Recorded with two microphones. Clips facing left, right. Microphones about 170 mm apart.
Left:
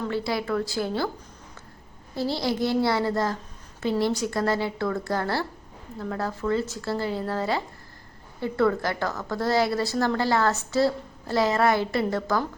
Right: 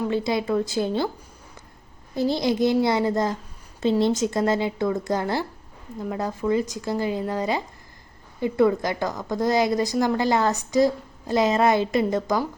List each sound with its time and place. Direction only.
0.0 s a woman's voice: 20° right (ahead or behind)
2.1 s a woman's voice: 20° right (ahead or behind)